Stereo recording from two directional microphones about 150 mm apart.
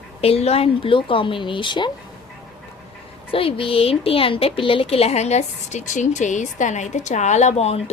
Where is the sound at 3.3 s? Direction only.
40° left (ahead or behind).